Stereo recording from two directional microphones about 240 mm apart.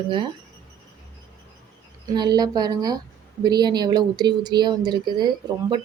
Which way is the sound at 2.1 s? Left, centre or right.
Centre.